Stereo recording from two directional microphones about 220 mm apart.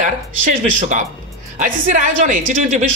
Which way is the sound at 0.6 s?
35° right (ahead or behind).